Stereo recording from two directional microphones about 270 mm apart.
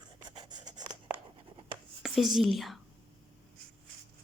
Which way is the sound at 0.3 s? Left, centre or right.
Centre.